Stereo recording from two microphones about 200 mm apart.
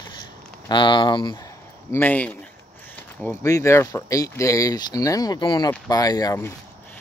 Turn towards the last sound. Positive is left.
turn(degrees=15)  # may be behind; listen again after turning